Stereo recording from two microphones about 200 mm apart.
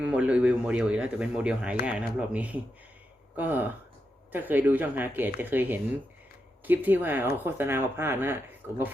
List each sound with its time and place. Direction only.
0.0 s speech: 5° right (ahead or behind)